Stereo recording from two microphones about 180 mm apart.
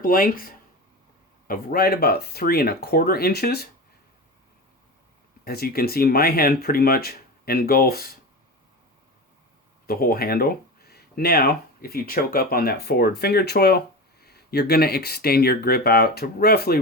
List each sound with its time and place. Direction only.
0.0 s speech: 50° left (ahead or behind)
1.5 s speech: 55° left (ahead or behind)
5.5 s speech: 60° left (ahead or behind)
9.8 s speech: 55° left (ahead or behind)